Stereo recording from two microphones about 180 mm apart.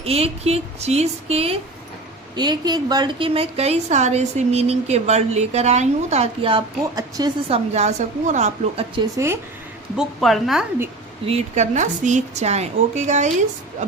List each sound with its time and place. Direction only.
0.0 s a woman's voice: 35° right (ahead or behind)
2.3 s a woman's voice: 25° right (ahead or behind); by 8.8 s 40° right (ahead or behind)
9.0 s a woman's voice: 15° right (ahead or behind)
9.9 s a woman's voice: centre (ahead or behind)
11.3 s a woman's voice: 40° right (ahead or behind)